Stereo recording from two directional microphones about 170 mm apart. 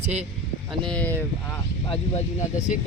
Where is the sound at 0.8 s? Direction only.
5° left (ahead or behind).